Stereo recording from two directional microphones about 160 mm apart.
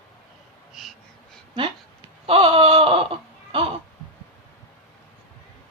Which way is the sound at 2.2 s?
35° right (ahead or behind).